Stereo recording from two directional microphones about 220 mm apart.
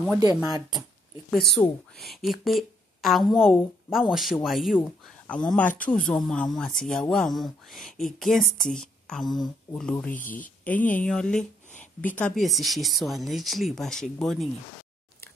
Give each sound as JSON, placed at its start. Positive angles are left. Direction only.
{"t": 0.2, "sound": "speech", "side_deg": -15}
{"t": 1.3, "sound": "speech", "side_deg": 0}
{"t": 10.1, "sound": "speech", "side_deg": 35}
{"t": 10.6, "sound": "a woman's voice", "side_deg": 5}